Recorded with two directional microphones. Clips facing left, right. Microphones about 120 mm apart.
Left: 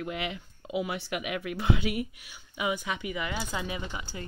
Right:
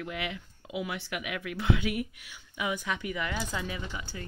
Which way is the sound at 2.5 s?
15° left (ahead or behind).